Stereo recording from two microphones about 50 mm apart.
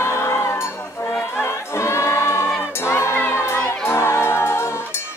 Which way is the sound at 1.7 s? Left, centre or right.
Left.